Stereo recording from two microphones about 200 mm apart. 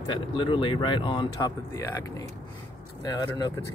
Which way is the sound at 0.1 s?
25° left (ahead or behind).